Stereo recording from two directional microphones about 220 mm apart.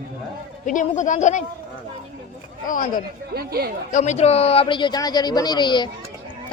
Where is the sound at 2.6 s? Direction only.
35° left (ahead or behind).